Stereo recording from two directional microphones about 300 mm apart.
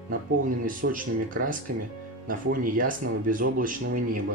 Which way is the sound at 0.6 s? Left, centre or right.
Right.